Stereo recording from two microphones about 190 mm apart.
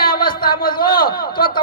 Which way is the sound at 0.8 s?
50° left (ahead or behind).